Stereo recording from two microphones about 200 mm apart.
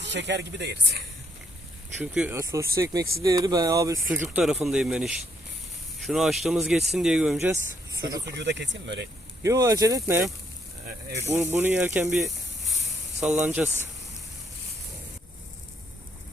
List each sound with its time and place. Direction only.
0.0 s speech: 60° right (ahead or behind)
2.0 s speech: 10° right (ahead or behind)
8.2 s speech: 60° right (ahead or behind)
9.4 s speech: 15° right (ahead or behind)
11.3 s speech: 10° right (ahead or behind)
12.1 s snake: centre (ahead or behind)
13.1 s speech: 5° right (ahead or behind)